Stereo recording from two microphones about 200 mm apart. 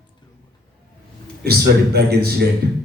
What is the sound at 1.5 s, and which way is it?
Speech, 50° right (ahead or behind).